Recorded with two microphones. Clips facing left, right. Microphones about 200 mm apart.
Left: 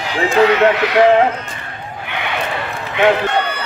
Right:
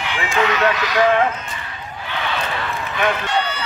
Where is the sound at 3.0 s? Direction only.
35° left (ahead or behind).